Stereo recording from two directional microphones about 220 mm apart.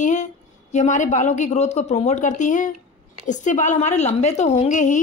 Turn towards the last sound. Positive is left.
turn(degrees=35)  # may be behind; listen again after turning